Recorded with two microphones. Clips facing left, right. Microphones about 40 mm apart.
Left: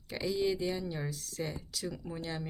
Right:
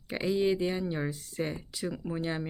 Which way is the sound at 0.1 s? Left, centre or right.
Right.